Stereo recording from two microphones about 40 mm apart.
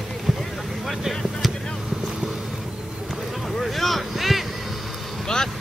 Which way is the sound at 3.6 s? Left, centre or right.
Centre.